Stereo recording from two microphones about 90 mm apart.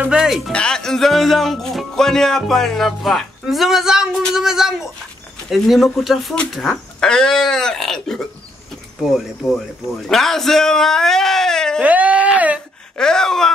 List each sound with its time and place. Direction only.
0.5 s music: 10° left (ahead or behind)
10.0 s music: 5° left (ahead or behind)
11.8 s speech: 15° right (ahead or behind)
12.9 s a sound: 5° left (ahead or behind)